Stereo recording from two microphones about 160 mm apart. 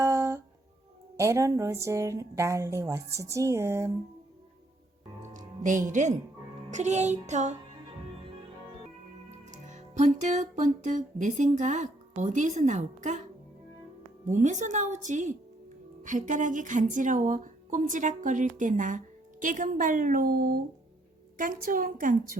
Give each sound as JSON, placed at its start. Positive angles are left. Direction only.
{"t": 0.0, "sound": "music", "side_deg": -15}
{"t": 1.1, "sound": "a woman's voice", "side_deg": -20}
{"t": 5.2, "sound": "speech", "side_deg": -50}
{"t": 9.5, "sound": "speech", "side_deg": -50}
{"t": 14.3, "sound": "a woman's voice", "side_deg": -50}